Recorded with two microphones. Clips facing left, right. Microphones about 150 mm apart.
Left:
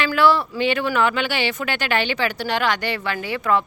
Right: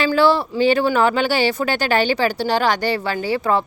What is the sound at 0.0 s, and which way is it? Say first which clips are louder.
Speech: right 2 dB; 30° right (ahead or behind).